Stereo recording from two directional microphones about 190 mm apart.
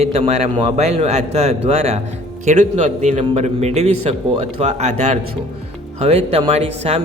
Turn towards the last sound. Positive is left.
turn(degrees=-35)  # may be behind; listen again after turning